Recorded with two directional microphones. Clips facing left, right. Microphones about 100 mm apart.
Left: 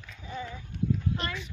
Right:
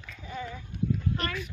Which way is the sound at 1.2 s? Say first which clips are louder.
Right 2 dB; 25° left (ahead or behind).